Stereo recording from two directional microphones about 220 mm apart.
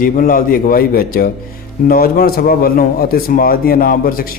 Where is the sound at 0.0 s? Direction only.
40° left (ahead or behind).